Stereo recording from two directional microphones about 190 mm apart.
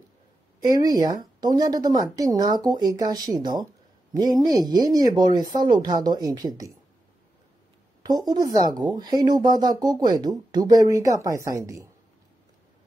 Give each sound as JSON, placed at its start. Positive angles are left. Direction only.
{"t": 0.6, "sound": "speech", "side_deg": -20}
{"t": 8.0, "sound": "a woman's voice", "side_deg": -20}